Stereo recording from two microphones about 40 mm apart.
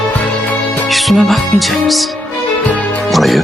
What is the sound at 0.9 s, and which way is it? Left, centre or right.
Music, centre.